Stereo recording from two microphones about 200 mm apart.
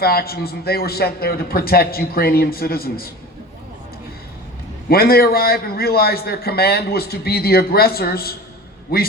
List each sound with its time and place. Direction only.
0.0 s a man's voice: 50° left (ahead or behind)
4.9 s a man's voice: 50° left (ahead or behind)